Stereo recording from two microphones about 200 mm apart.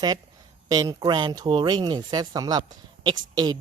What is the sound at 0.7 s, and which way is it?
Speech, 20° right (ahead or behind).